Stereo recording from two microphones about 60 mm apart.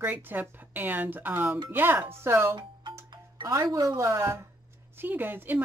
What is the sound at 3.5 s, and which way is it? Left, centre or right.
Speech, right.